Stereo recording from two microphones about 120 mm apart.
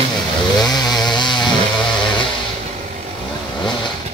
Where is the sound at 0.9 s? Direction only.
35° left (ahead or behind).